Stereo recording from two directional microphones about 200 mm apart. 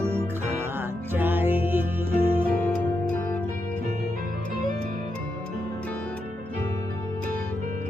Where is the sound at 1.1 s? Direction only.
10° right (ahead or behind).